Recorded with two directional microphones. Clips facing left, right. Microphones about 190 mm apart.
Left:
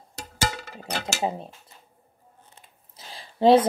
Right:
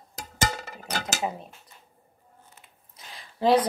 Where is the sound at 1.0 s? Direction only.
30° left (ahead or behind).